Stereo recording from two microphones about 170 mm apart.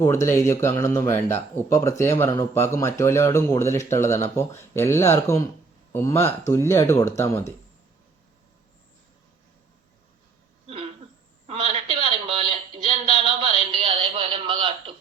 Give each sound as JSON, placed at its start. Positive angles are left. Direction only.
{"t": 0.0, "sound": "speech", "side_deg": 15}
{"t": 11.4, "sound": "music", "side_deg": -40}